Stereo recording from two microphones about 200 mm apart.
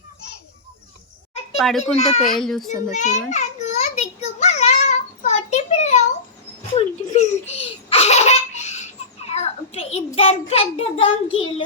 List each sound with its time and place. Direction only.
1.5 s a child's voice: centre (ahead or behind)
1.8 s a child's voice: 30° left (ahead or behind)
2.3 s a child's voice: centre (ahead or behind)
2.9 s a sound: 35° left (ahead or behind)
6.7 s baby laughter: 35° left (ahead or behind)
10.2 s a child's voice: 30° left (ahead or behind)